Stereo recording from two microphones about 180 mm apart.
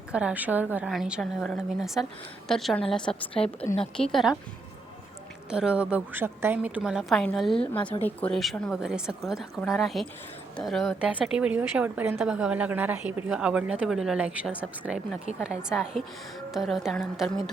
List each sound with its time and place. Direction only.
0.1 s a woman's voice: 5° right (ahead or behind)
5.5 s a woman's voice: 5° right (ahead or behind)